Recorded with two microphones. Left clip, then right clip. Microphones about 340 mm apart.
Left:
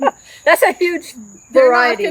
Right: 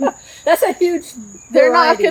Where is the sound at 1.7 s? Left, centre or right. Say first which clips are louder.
Right 1 dB; centre.